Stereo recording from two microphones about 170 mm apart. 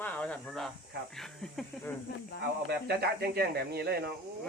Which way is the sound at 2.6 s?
70° right (ahead or behind).